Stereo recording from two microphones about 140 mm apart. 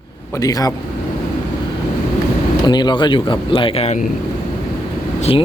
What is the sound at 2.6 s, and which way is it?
Speech, 30° left (ahead or behind).